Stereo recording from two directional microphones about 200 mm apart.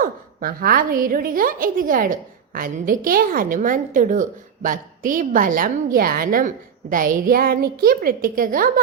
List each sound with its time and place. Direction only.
0.0 s a woman's voice: 45° right (ahead or behind)